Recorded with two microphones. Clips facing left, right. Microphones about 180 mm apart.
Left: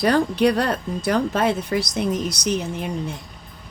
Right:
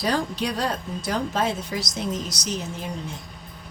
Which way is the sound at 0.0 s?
60° left (ahead or behind).